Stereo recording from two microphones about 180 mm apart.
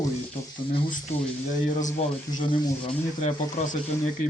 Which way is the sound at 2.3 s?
25° left (ahead or behind).